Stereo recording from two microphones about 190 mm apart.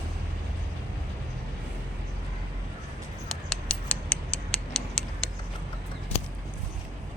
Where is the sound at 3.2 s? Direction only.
5° left (ahead or behind).